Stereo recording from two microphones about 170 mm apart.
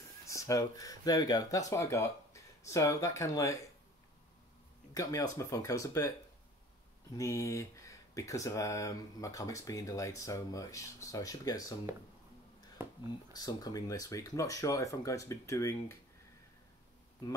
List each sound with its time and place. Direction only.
0.3 s speech: 20° left (ahead or behind)
4.9 s speech: 20° left (ahead or behind)
7.2 s speech: 20° left (ahead or behind)
11.9 s speech: 15° right (ahead or behind)
13.3 s speech: 20° left (ahead or behind)